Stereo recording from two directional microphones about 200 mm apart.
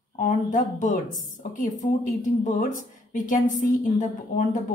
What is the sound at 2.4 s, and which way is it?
Speech, 40° left (ahead or behind).